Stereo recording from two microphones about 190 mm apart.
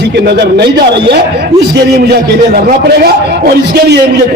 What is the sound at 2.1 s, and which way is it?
A man's voice, 55° right (ahead or behind).